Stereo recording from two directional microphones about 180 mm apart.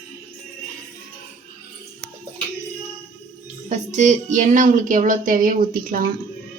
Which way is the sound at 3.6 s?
40° right (ahead or behind).